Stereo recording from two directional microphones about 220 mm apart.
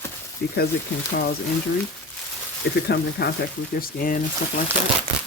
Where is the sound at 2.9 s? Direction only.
45° left (ahead or behind).